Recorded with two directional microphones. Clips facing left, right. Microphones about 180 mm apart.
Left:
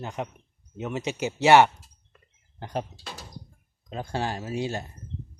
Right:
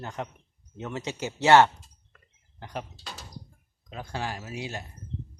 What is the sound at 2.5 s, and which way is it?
Speech, 35° left (ahead or behind).